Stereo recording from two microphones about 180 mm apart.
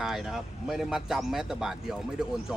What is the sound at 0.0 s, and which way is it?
Speech, centre (ahead or behind).